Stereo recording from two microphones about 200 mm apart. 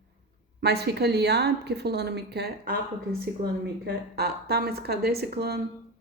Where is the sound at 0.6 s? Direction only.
55° right (ahead or behind).